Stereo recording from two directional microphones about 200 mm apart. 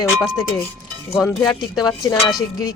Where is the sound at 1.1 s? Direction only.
10° left (ahead or behind).